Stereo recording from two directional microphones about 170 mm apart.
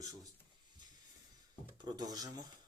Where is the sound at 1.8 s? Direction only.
25° right (ahead or behind).